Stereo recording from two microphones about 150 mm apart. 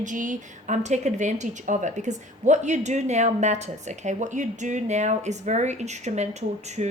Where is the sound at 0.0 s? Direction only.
60° right (ahead or behind).